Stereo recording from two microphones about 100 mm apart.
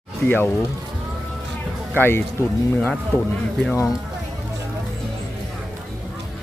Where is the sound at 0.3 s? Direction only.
20° left (ahead or behind).